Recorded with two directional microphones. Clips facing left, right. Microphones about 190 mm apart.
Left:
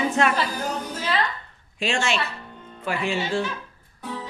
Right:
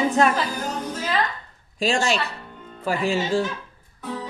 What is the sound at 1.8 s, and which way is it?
Speech, 35° right (ahead or behind).